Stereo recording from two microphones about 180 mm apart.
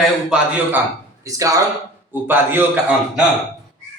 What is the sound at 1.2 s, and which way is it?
A man's voice, 20° right (ahead or behind).